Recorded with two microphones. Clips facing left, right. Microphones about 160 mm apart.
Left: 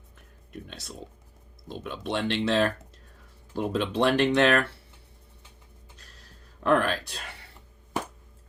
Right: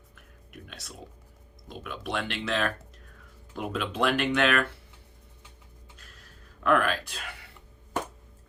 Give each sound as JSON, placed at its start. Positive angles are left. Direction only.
{"t": 0.5, "sound": "music", "side_deg": 30}
{"t": 1.6, "sound": "speech", "side_deg": 25}
{"t": 6.6, "sound": "speech", "side_deg": 30}